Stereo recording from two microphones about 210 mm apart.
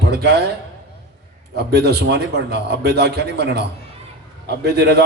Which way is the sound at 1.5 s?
50° right (ahead or behind).